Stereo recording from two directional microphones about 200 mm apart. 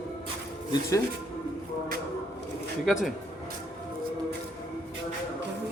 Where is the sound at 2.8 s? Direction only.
Centre (ahead or behind).